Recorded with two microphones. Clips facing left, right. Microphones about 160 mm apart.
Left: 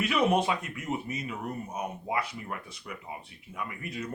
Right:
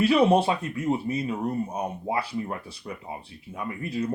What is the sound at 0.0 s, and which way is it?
Speech, 30° right (ahead or behind).